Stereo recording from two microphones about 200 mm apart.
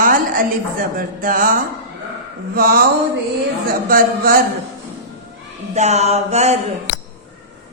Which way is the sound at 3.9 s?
45° right (ahead or behind).